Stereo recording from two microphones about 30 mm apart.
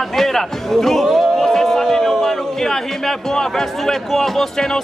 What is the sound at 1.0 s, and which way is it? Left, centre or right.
Speech, centre.